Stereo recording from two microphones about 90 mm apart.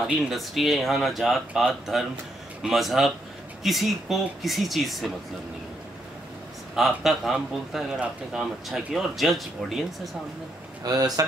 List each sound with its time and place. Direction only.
0.0 s a man's voice: centre (ahead or behind)
6.7 s a man's voice: 5° right (ahead or behind)
10.8 s speech: 45° right (ahead or behind)